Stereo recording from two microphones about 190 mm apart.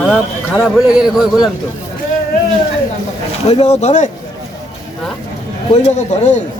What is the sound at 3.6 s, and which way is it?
Speech, 35° left (ahead or behind).